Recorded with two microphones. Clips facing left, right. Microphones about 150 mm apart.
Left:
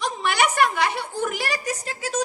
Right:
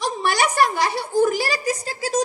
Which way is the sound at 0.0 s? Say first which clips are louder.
Right 1 dB; 35° right (ahead or behind).